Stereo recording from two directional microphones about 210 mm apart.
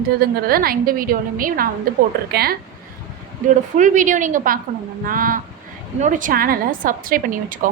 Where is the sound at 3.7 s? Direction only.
35° right (ahead or behind).